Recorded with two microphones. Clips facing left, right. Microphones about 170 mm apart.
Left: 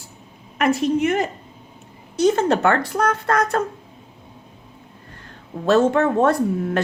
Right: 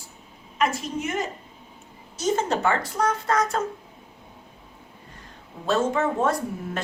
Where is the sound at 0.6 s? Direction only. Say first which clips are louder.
Left 8 dB; 65° left (ahead or behind).